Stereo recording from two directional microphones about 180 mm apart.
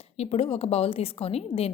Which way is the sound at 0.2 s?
35° left (ahead or behind).